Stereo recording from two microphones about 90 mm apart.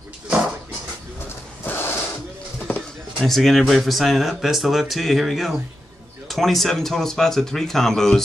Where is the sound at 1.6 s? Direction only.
25° left (ahead or behind).